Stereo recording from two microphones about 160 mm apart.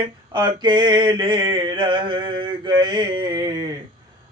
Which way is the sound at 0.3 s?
30° right (ahead or behind).